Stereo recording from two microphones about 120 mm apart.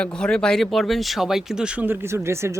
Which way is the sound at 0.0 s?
5° left (ahead or behind).